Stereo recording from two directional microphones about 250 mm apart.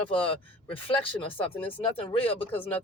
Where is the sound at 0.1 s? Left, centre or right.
Left.